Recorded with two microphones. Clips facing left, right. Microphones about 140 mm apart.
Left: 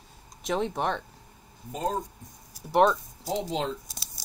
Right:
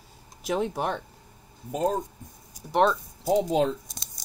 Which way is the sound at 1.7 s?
50° right (ahead or behind).